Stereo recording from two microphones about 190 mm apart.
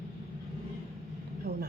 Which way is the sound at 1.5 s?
35° right (ahead or behind).